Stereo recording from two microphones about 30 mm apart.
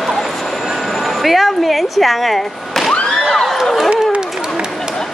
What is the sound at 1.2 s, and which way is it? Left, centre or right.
Speech, centre.